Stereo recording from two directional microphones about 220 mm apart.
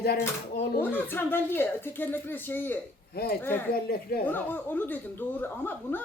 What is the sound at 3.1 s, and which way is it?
Speech, 45° left (ahead or behind).